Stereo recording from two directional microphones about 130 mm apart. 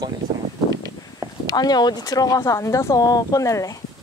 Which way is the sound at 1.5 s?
30° left (ahead or behind).